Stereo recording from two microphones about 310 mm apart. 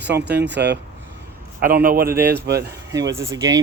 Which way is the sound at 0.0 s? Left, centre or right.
Right.